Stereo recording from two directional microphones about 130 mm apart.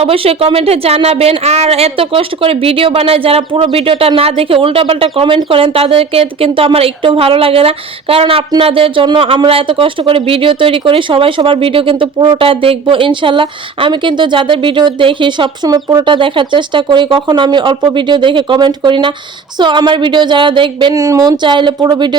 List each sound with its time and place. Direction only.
0.0 s speech: 50° right (ahead or behind); by 16.0 s 30° right (ahead or behind)
16.0 s speech: 40° right (ahead or behind)
20.9 s speech: 25° right (ahead or behind)